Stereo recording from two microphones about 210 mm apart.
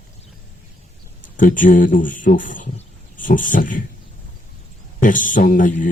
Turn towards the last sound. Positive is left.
turn(degrees=40)  # may be behind; listen again after turning